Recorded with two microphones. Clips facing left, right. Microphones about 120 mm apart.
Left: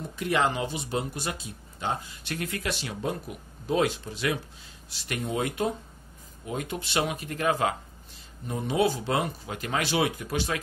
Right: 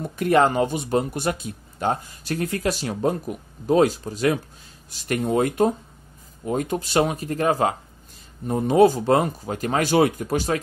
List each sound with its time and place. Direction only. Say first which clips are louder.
0.1 s speech: right 8 dB; 50° right (ahead or behind)